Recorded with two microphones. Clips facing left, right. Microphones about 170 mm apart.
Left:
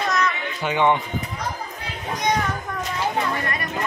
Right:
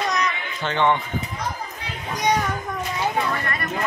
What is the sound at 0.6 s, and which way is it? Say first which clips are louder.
Speech: left 1 dB; 10° left (ahead or behind).